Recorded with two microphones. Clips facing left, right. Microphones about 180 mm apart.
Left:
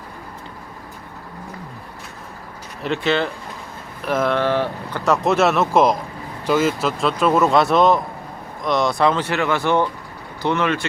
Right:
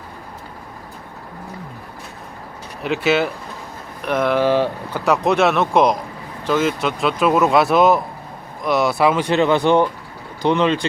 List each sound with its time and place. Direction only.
2.8 s speech: 5° right (ahead or behind)
4.4 s speech: 15° right (ahead or behind)
5.0 s speech: centre (ahead or behind); by 10.8 s 15° right (ahead or behind)